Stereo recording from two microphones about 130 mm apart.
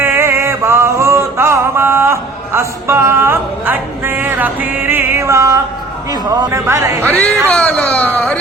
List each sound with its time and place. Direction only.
0.0 s music: 20° right (ahead or behind)
6.1 s a man's voice: 35° right (ahead or behind)
6.5 s speech: 20° right (ahead or behind)
7.5 s speech: 5° left (ahead or behind)